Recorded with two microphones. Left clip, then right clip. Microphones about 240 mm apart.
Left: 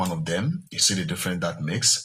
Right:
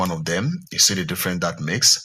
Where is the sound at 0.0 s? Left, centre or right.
Right.